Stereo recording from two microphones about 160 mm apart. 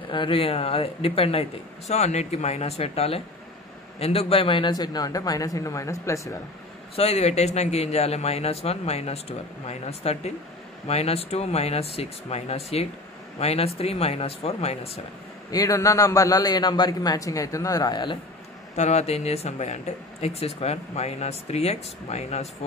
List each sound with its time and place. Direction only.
0.1 s a man's voice: 30° left (ahead or behind)
7.0 s speech: 40° left (ahead or behind)
15.5 s a man's voice: 20° left (ahead or behind)
18.8 s speech: 45° left (ahead or behind)